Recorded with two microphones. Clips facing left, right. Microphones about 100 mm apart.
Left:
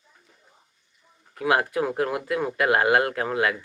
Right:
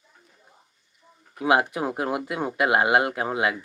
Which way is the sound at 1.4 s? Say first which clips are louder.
Right 1 dB; 20° right (ahead or behind).